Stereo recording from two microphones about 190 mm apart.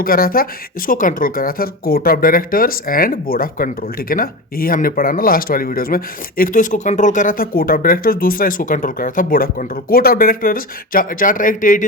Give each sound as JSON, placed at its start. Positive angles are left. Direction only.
{"t": 0.0, "sound": "speech", "side_deg": 50}